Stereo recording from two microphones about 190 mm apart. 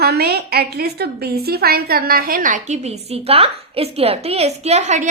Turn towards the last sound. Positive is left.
turn(degrees=-35)  # may be behind; listen again after turning